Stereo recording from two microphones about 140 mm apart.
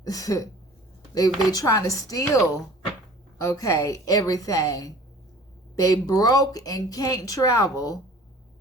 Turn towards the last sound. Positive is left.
turn(degrees=25)  # may be behind; listen again after turning